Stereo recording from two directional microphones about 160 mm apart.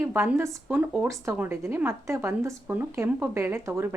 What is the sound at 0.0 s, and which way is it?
A woman's voice, 15° right (ahead or behind).